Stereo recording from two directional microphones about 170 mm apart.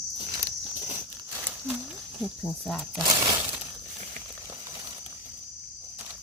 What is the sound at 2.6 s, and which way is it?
Speech, centre (ahead or behind).